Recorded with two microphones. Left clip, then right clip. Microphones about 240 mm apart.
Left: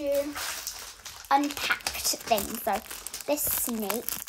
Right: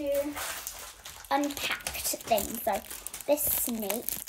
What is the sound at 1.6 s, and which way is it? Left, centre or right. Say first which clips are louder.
Speech: left 4 dB; left.